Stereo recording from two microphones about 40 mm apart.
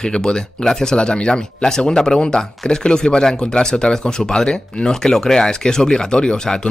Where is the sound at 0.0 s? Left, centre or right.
Left.